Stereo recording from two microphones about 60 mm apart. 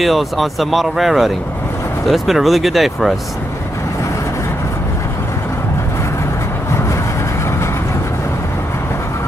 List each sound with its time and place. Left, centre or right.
0.0 s speech: centre